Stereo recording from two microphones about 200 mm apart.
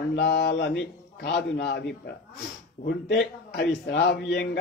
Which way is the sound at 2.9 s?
55° left (ahead or behind).